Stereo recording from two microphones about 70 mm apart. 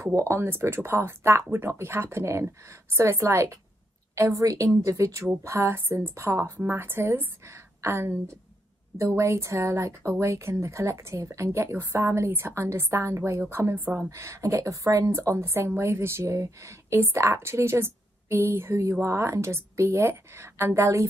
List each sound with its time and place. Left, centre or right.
0.0 s a woman's voice: right
14.1 s a woman's voice: right